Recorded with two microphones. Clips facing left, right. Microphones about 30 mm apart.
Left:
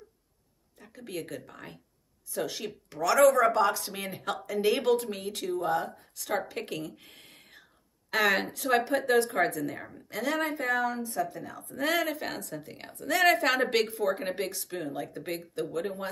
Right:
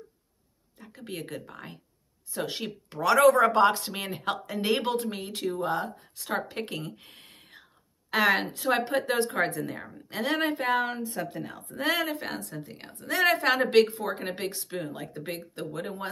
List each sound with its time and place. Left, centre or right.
0.7 s speech: right
2.3 s speech: right
3.2 s speech: right
4.5 s speech: right
10.0 s speech: right
11.8 s speech: centre
13.6 s speech: right
13.9 s speech: centre